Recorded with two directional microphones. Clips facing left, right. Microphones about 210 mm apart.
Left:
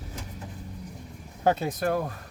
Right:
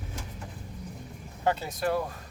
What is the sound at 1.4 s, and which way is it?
Speech, 50° left (ahead or behind).